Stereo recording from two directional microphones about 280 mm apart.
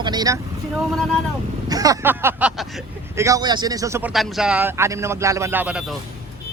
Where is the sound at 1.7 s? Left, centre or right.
Centre.